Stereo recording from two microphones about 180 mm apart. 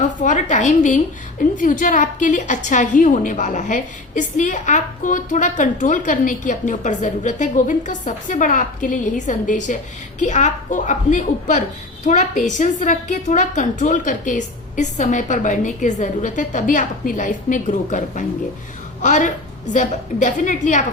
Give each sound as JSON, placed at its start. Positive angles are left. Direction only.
{"t": 0.0, "sound": "a woman's voice", "side_deg": 45}